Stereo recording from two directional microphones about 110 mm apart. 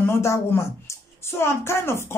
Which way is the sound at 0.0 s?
25° left (ahead or behind).